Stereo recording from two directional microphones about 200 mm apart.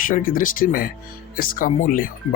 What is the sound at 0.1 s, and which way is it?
Speech, 45° left (ahead or behind).